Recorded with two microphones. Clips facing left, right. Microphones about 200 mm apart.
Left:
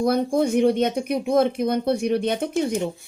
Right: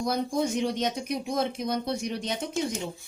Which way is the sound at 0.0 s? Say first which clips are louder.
Left 7 dB; 60° left (ahead or behind).